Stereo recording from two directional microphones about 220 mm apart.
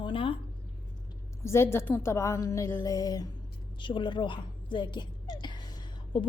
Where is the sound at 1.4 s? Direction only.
10° left (ahead or behind).